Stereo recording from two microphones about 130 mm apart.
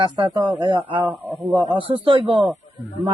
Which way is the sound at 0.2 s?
35° right (ahead or behind).